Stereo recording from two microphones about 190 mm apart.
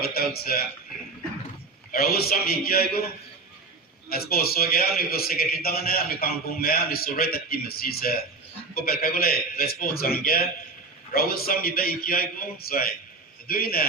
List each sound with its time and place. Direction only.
0.0 s a man's voice: 55° left (ahead or behind)
1.9 s a man's voice: 55° left (ahead or behind)
4.1 s a man's voice: 50° left (ahead or behind)